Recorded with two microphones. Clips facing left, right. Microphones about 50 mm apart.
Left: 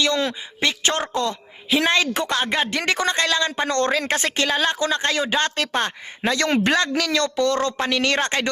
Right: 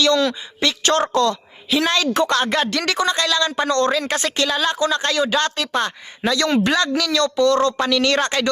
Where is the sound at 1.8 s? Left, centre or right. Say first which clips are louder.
Right 2 dB; left.